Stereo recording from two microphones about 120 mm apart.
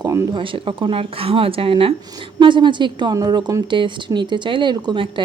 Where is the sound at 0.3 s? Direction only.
45° right (ahead or behind).